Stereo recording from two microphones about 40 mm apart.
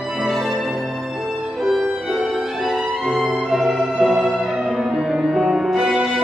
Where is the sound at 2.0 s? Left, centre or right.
Centre.